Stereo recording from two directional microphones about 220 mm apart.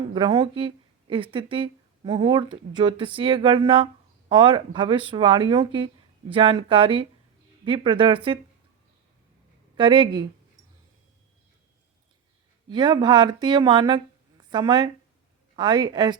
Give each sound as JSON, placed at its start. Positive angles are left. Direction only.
{"t": 0.1, "sound": "speech", "side_deg": -25}
{"t": 9.7, "sound": "speech", "side_deg": -20}
{"t": 12.6, "sound": "speech", "side_deg": -20}